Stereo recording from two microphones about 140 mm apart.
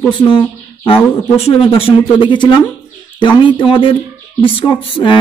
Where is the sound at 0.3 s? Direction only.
40° left (ahead or behind).